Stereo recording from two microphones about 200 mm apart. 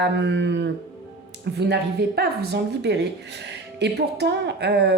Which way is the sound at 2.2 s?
55° right (ahead or behind).